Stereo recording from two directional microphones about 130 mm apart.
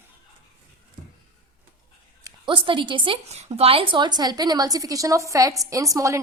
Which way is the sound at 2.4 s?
40° right (ahead or behind).